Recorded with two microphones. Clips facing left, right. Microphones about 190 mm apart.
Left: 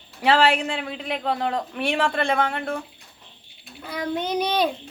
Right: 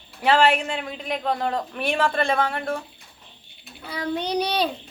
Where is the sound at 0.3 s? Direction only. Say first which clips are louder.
Even; 30° left (ahead or behind).